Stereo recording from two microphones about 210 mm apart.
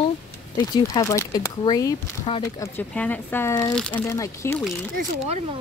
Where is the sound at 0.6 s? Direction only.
15° left (ahead or behind).